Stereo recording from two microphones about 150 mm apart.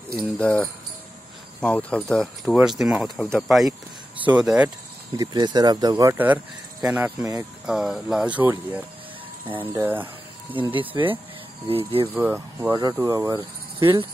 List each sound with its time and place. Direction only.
0.4 s speech: 10° left (ahead or behind)
5.1 s speech: 25° right (ahead or behind)
6.1 s speech: 10° right (ahead or behind)
10.5 s speech: 35° right (ahead or behind)
12.1 s speech: 15° right (ahead or behind); by 14.0 s 35° right (ahead or behind)